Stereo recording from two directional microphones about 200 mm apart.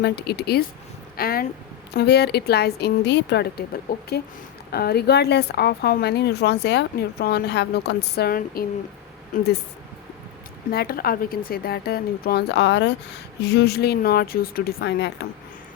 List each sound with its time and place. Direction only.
0.0 s a woman's voice: 55° left (ahead or behind)
10.7 s speech: 50° left (ahead or behind)